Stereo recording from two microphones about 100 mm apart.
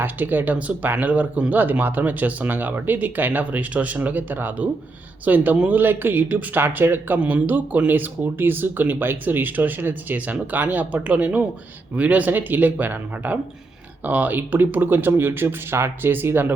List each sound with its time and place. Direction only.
0.0 s speech: 20° right (ahead or behind)